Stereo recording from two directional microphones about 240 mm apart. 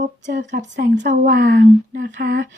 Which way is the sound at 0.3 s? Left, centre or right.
Right.